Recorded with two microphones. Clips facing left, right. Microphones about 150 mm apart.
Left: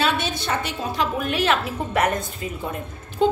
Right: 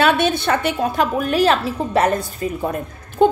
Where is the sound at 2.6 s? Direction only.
50° right (ahead or behind).